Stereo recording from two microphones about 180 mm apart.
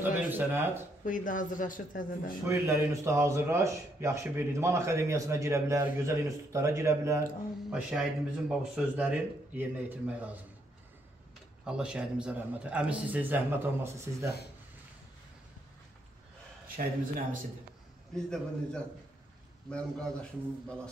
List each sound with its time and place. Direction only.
0.0 s speech: 10° right (ahead or behind)
1.0 s speech: 45° left (ahead or behind)
2.4 s speech: 15° right (ahead or behind)
7.7 s speech: 5° right (ahead or behind)
11.6 s speech: 5° right (ahead or behind)
18.1 s a man's voice: 5° left (ahead or behind)